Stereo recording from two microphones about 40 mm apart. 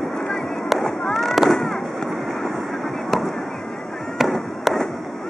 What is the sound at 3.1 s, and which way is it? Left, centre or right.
Fireworks, centre.